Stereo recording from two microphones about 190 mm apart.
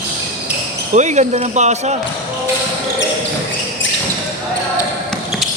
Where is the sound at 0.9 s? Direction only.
40° right (ahead or behind).